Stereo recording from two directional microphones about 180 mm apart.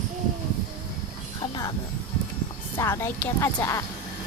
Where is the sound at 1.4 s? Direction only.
20° left (ahead or behind).